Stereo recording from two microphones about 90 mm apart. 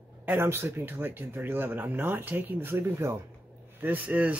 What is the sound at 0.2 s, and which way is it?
Speech, 25° right (ahead or behind).